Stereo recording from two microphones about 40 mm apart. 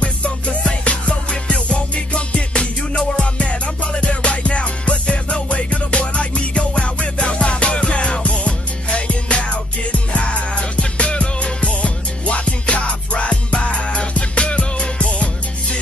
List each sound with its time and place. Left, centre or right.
0.0 s music: left